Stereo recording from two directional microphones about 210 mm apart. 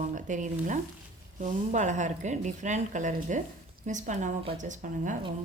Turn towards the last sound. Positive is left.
turn(degrees=-35)  # may be behind; listen again after turning